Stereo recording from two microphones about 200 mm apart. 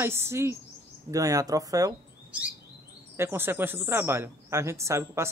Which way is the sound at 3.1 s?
10° right (ahead or behind).